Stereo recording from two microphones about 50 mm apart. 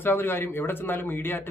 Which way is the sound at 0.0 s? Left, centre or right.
Left.